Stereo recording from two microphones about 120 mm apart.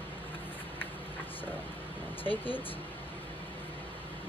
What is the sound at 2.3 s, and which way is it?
Speech, 45° right (ahead or behind).